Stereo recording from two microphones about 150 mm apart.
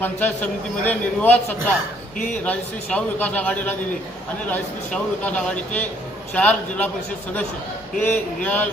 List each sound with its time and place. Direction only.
0.0 s a man's voice: 10° left (ahead or behind)
2.1 s a man's voice: 60° left (ahead or behind)
2.4 s a man's voice: 10° left (ahead or behind)
8.0 s a man's voice: 10° left (ahead or behind)